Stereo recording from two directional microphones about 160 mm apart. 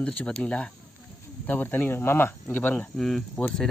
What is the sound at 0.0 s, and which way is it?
Speech, 5° left (ahead or behind).